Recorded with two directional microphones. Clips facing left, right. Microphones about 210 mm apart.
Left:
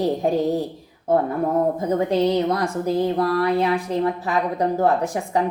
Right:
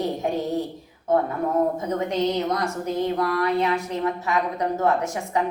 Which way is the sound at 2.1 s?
30° left (ahead or behind).